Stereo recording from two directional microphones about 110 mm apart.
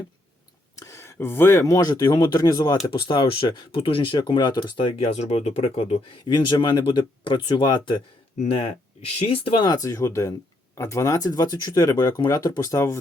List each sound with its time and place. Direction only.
0.8 s speech: 25° left (ahead or behind)
2.8 s speech: 45° left (ahead or behind)
5.1 s speech: 75° left (ahead or behind)
6.2 s speech: 45° left (ahead or behind)
9.1 s speech: 55° left (ahead or behind)
9.6 s speech: 30° left (ahead or behind)